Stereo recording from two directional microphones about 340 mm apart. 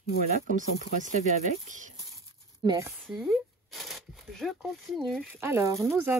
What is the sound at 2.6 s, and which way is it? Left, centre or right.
Speech, centre.